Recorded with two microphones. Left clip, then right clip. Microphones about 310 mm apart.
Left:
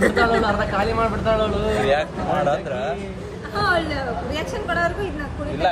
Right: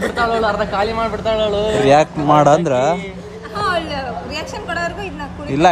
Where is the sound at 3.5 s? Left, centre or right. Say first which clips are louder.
Right 1 dB; right.